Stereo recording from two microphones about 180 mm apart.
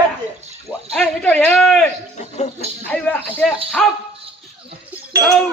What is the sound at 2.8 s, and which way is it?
Speech, 10° left (ahead or behind).